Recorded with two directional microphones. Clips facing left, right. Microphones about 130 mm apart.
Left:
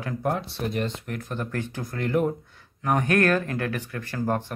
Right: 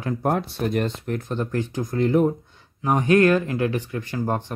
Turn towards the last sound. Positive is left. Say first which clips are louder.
# right 1 dB
turn(degrees=-15)  # may be behind; listen again after turning